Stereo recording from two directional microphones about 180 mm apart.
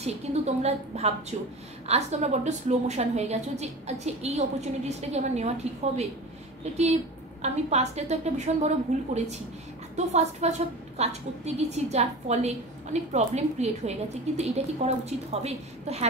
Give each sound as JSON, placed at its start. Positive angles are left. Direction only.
{"t": 0.0, "sound": "a woman's voice", "side_deg": -40}
{"t": 7.4, "sound": "a woman's voice", "side_deg": -40}